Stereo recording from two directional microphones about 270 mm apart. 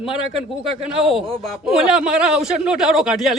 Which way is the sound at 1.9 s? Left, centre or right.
Centre.